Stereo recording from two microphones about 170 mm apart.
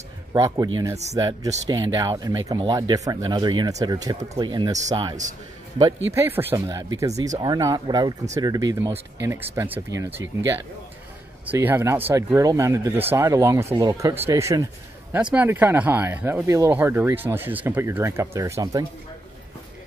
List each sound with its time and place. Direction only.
0.3 s speech: 20° right (ahead or behind)
6.1 s speech: 15° right (ahead or behind)
11.4 s speech: 10° right (ahead or behind)
15.1 s speech: 5° right (ahead or behind)